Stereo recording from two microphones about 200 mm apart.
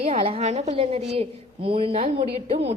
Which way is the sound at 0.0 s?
30° right (ahead or behind).